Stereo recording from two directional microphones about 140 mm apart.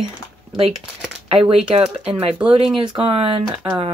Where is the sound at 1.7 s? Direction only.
45° right (ahead or behind).